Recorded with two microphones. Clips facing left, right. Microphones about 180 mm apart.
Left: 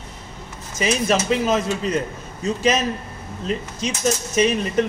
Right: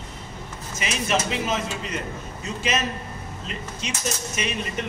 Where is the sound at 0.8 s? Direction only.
40° left (ahead or behind).